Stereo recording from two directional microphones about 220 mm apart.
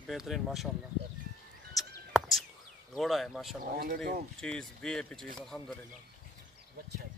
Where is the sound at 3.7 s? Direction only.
45° right (ahead or behind).